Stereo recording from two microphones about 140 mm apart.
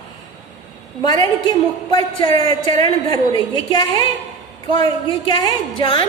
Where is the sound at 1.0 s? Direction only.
30° left (ahead or behind).